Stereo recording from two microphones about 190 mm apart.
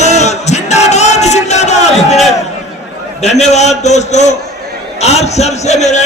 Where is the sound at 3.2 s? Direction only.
35° left (ahead or behind).